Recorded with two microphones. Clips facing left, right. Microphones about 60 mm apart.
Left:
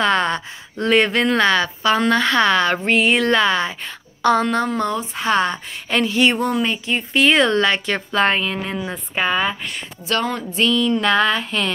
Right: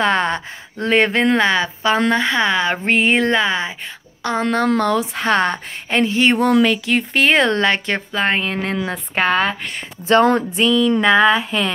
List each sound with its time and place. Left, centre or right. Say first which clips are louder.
0.0 s speech: right 1 dB; right
2.8 s speech: right 1 dB; right
3.3 s a sound: left 1 dB; centre
4.2 s speech: left 6 dB; centre
4.6 s speech: right 5 dB; right
5.9 s speech: right 1 dB; right
6.4 s speech: right 6 dB; right
7.2 s speech: left 1 dB; right
8.6 s speech: right 4 dB; right
10.1 s speech: right 8 dB; right
10.6 s a sound: right 1 dB; centre